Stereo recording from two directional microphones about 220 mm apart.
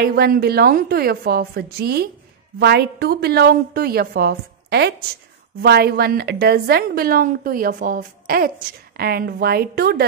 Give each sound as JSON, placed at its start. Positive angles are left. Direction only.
{"t": 0.0, "sound": "a woman's voice", "side_deg": -45}